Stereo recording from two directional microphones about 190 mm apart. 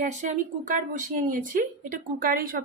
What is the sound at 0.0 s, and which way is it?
Speech, 40° right (ahead or behind).